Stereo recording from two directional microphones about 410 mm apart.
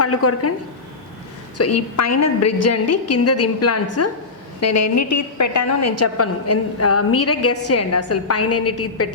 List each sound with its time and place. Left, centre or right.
0.0 s a woman's voice: left
1.5 s a woman's voice: left